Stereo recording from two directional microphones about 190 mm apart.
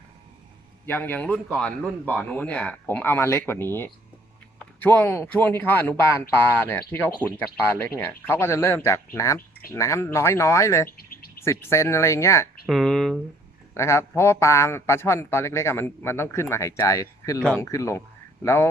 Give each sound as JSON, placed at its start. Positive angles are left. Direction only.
{"t": 0.9, "sound": "a man's voice", "side_deg": 10}
{"t": 10.8, "sound": "bird", "side_deg": 50}
{"t": 11.6, "sound": "a man's voice", "side_deg": 15}
{"t": 12.6, "sound": "speech", "side_deg": 0}
{"t": 13.7, "sound": "a man's voice", "side_deg": 15}